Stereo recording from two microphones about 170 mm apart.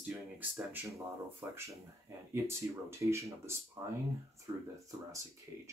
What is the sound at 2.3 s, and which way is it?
Speech, 15° right (ahead or behind).